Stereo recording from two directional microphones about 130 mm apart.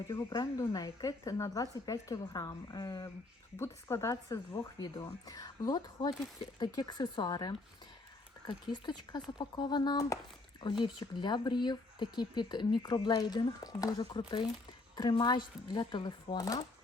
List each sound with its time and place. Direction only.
0.1 s a woman's voice: 25° left (ahead or behind)
3.6 s a woman's voice: 20° left (ahead or behind)